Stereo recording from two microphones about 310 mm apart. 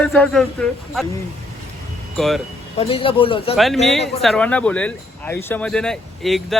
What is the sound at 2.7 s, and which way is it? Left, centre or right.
Speech, centre.